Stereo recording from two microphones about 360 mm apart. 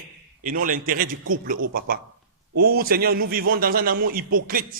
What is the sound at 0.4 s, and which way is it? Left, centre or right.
A man's voice, right.